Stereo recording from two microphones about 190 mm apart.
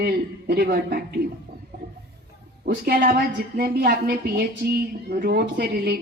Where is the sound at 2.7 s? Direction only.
55° right (ahead or behind).